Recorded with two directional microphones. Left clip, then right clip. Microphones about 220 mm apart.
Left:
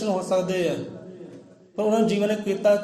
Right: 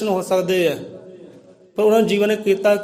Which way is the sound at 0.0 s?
45° right (ahead or behind).